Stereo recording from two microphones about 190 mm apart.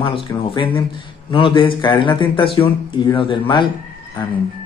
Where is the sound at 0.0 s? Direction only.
25° left (ahead or behind).